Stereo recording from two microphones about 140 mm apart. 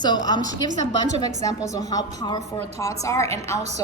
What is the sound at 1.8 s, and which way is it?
Speech, 25° left (ahead or behind).